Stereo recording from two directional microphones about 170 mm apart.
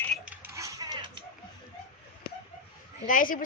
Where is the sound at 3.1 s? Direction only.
50° left (ahead or behind).